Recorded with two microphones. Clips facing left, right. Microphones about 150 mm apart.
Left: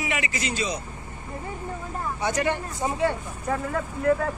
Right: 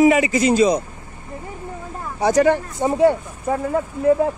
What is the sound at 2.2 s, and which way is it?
Speech, 40° right (ahead or behind).